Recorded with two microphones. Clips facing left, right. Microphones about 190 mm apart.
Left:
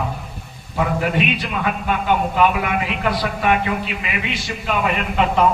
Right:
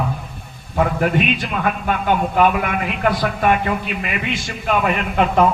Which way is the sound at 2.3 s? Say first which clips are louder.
Right 1 dB; 50° right (ahead or behind).